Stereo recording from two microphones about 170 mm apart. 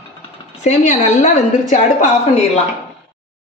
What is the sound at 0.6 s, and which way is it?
A woman's voice, 40° left (ahead or behind).